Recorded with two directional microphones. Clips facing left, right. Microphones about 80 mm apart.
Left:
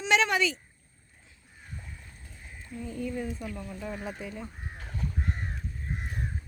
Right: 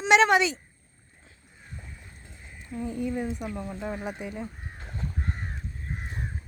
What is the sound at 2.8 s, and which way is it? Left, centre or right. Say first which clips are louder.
Speech: right 4 dB; centre.